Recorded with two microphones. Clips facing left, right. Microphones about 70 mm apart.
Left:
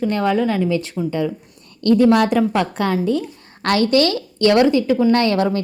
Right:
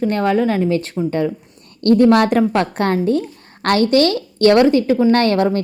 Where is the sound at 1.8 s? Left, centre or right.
Right.